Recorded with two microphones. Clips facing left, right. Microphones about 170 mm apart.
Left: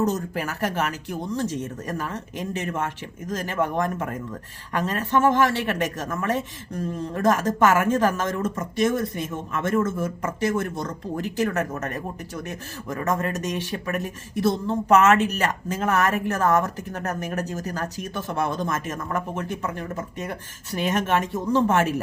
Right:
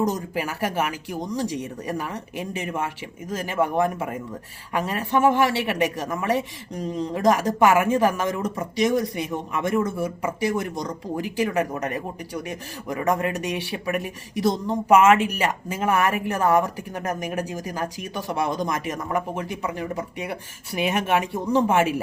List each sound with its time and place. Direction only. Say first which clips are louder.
0.0 s a woman's voice: even; 10° right (ahead or behind)